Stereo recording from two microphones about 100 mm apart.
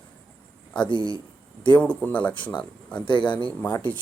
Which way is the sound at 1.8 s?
15° left (ahead or behind).